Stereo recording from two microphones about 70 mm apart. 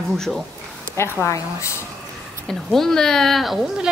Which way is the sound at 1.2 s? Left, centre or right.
Left.